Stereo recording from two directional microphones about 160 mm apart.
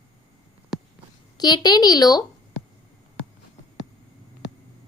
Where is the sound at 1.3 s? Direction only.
25° left (ahead or behind).